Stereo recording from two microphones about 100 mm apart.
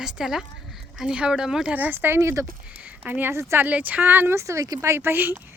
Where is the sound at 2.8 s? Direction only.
15° right (ahead or behind).